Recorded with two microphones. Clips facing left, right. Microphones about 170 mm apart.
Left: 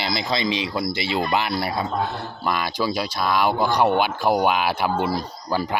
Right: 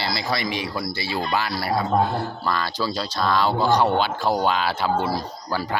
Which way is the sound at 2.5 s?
15° left (ahead or behind).